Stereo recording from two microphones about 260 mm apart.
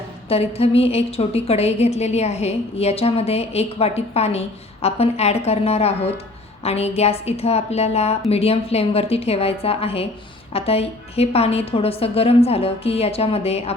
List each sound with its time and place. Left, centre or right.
0.3 s a woman's voice: left